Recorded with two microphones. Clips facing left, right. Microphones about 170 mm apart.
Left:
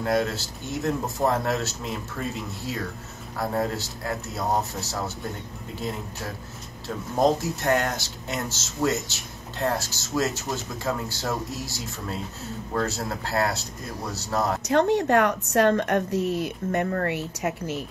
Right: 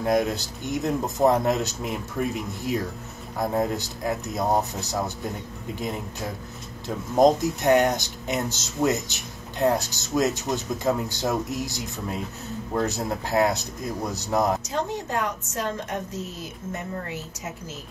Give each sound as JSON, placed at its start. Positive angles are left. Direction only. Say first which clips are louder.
{"t": 0.0, "sound": "speech", "louder": "right 2 dB", "side_deg": -15}
{"t": 14.6, "sound": "a woman's voice", "louder": "left 8 dB", "side_deg": 65}